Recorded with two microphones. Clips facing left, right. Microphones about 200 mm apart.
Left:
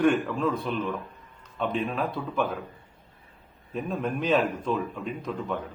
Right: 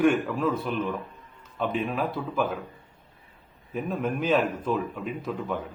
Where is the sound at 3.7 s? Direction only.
5° right (ahead or behind).